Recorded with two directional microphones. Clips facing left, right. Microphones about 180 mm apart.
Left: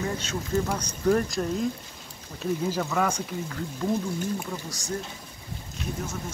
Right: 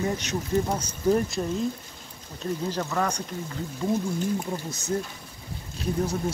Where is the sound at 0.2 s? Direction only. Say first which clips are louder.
Right 2 dB; 15° right (ahead or behind).